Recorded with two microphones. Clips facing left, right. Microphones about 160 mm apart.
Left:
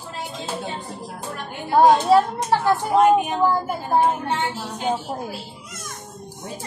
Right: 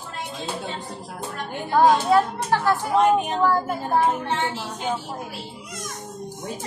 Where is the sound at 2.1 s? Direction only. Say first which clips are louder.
Left 3 dB; 30° left (ahead or behind).